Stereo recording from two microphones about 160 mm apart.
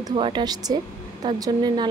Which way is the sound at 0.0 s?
30° right (ahead or behind).